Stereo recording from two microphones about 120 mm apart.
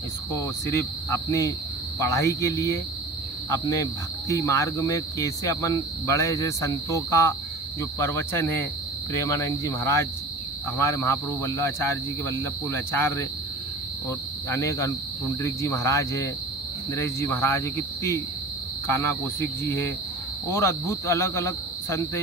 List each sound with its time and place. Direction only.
0.3 s speech: 25° left (ahead or behind)
14.1 s cricket: 25° left (ahead or behind)
15.4 s speech: 25° left (ahead or behind)